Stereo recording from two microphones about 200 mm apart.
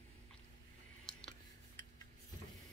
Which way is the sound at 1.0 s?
Centre (ahead or behind).